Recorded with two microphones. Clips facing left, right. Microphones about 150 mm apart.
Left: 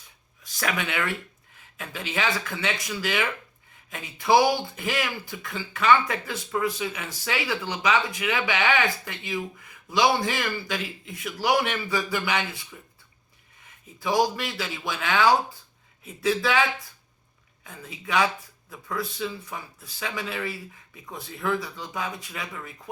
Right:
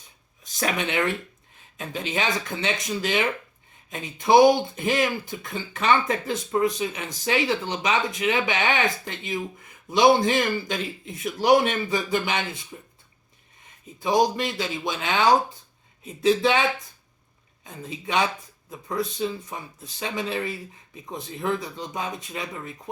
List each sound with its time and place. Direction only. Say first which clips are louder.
0.4 s speech: right 2 dB; 20° right (ahead or behind)
14.0 s speech: right 2 dB; 20° right (ahead or behind)